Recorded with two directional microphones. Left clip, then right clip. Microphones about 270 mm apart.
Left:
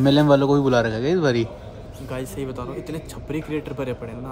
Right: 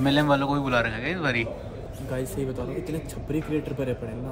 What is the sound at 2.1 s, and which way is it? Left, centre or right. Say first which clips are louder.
Speech: left 1 dB; centre.